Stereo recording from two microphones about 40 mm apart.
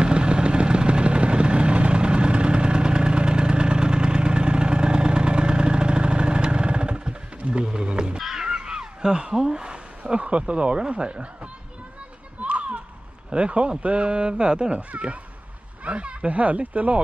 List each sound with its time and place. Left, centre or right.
0.0 s vehicle: right
7.6 s livestock: right
8.2 s a sound: centre
8.5 s speech: right
12.4 s a sound: right
13.3 s speech: right
15.8 s speech: right